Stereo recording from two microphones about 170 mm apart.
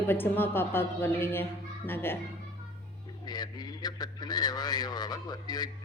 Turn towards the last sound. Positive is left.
turn(degrees=25)  # may be behind; listen again after turning